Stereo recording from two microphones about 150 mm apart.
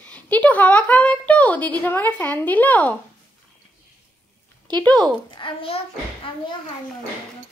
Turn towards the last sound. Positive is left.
turn(degrees=35)  # may be behind; listen again after turning